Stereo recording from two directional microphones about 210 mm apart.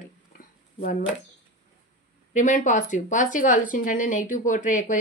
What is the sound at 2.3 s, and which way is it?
Speech, 35° left (ahead or behind).